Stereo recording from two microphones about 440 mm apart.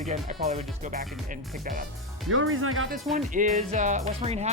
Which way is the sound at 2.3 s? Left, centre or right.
Right.